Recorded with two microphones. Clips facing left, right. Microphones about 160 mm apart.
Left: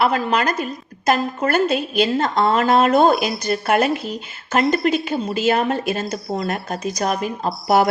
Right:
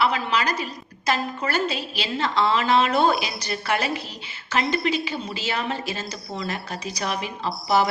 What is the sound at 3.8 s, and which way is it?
Speech, centre (ahead or behind).